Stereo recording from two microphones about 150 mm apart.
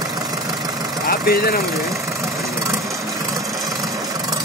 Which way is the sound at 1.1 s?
90° left.